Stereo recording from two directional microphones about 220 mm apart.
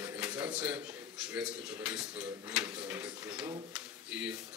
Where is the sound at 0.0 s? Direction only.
10° right (ahead or behind).